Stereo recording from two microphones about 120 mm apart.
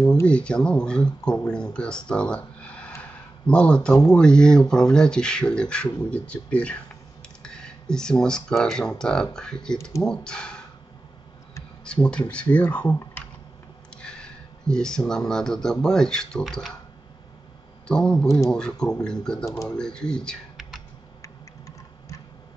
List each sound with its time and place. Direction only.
0.1 s speech: 10° left (ahead or behind)
3.0 s a sound: 10° left (ahead or behind)
4.1 s speech: 5° left (ahead or behind)
11.8 s speech: 5° left (ahead or behind)
17.8 s speech: 5° left (ahead or behind)
21.2 s tick-tock: 25° left (ahead or behind)